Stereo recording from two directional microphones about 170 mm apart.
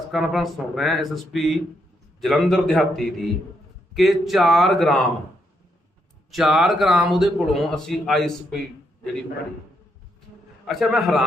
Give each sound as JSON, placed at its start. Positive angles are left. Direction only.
{"t": 0.1, "sound": "a man's voice", "side_deg": 0}
{"t": 6.3, "sound": "a man's voice", "side_deg": 0}
{"t": 10.7, "sound": "a man's voice", "side_deg": 0}